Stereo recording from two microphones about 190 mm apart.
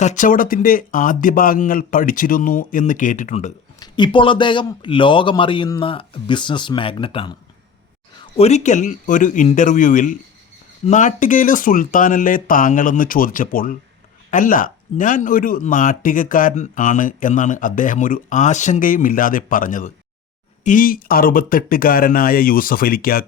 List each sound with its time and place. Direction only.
0.0 s speech: 40° left (ahead or behind)
3.8 s a man's voice: 25° left (ahead or behind)
8.4 s speech: 35° left (ahead or behind)